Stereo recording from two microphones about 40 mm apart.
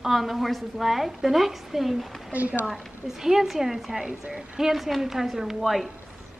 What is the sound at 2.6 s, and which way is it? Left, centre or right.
A woman's voice, centre.